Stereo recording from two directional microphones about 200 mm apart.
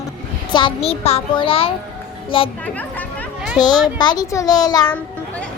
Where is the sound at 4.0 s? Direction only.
20° left (ahead or behind).